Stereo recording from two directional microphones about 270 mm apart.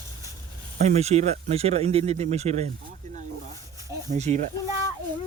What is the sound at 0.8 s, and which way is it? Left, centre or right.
Speech, right.